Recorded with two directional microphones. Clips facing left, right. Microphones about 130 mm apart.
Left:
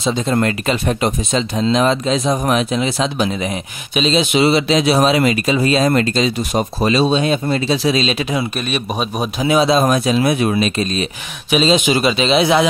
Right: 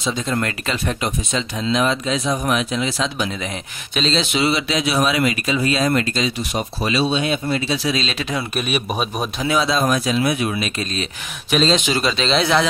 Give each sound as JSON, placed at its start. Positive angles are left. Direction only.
{"t": 0.0, "sound": "speech", "side_deg": 30}
{"t": 2.7, "sound": "speech", "side_deg": 20}
{"t": 3.9, "sound": "a man's voice", "side_deg": 10}
{"t": 4.4, "sound": "speech", "side_deg": 30}
{"t": 6.5, "sound": "speech", "side_deg": 45}
{"t": 8.0, "sound": "a man's voice", "side_deg": 15}
{"t": 8.5, "sound": "a man's voice", "side_deg": -5}
{"t": 9.4, "sound": "speech", "side_deg": 20}
{"t": 11.5, "sound": "a man's voice", "side_deg": 10}